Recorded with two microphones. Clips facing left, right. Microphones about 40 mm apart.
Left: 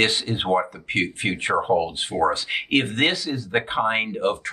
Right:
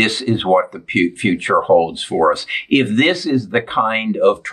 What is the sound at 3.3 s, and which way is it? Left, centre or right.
Speech, right.